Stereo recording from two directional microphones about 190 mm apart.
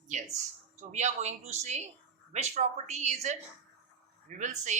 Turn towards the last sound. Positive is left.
turn(degrees=-40)  # may be behind; listen again after turning